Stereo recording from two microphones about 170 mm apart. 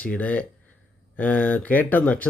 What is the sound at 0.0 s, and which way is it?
Speech, 10° left (ahead or behind).